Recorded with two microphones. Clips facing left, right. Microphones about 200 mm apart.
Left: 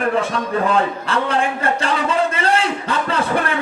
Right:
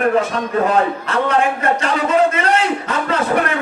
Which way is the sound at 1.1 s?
30° left (ahead or behind).